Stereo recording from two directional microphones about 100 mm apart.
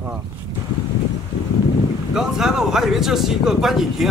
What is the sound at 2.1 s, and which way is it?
Speech, 5° right (ahead or behind).